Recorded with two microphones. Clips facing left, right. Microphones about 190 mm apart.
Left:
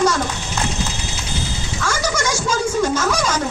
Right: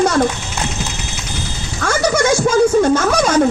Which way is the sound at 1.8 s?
60° right (ahead or behind).